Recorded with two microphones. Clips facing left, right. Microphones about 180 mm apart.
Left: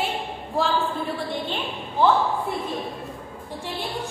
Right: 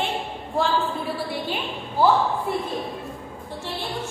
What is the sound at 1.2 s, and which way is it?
Speech, 5° right (ahead or behind).